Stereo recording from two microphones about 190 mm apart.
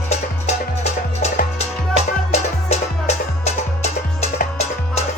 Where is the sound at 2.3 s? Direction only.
35° left (ahead or behind).